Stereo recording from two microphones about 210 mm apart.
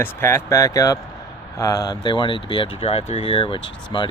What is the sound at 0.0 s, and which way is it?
Speech, 10° left (ahead or behind).